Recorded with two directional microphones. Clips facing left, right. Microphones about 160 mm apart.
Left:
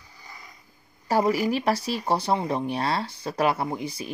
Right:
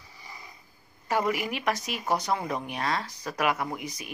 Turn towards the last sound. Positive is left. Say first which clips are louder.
# left 5 dB
turn(degrees=30)  # may be behind; listen again after turning